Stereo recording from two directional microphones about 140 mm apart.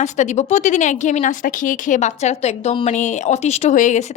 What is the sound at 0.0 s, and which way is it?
A woman's voice, 55° left (ahead or behind).